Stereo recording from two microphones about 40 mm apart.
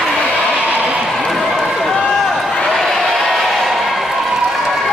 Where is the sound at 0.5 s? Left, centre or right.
Right.